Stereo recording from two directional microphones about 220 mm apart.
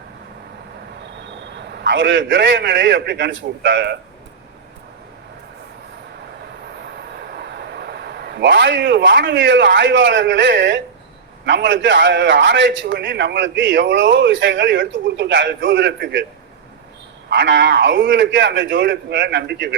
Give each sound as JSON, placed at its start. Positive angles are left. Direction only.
{"t": 1.5, "sound": "a man's voice", "side_deg": -50}
{"t": 7.2, "sound": "a man's voice", "side_deg": -50}
{"t": 17.2, "sound": "a man's voice", "side_deg": -55}